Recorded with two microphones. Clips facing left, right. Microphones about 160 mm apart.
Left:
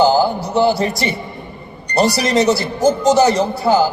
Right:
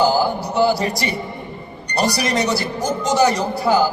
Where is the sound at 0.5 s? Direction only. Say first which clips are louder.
Left 2 dB; 25° left (ahead or behind).